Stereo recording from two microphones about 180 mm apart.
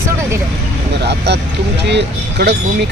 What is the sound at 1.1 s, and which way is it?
Speech, 70° right (ahead or behind).